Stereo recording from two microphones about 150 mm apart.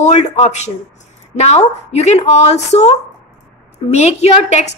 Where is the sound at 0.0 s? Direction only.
50° left (ahead or behind).